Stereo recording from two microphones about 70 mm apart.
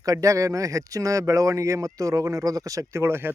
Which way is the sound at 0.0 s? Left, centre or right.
Right.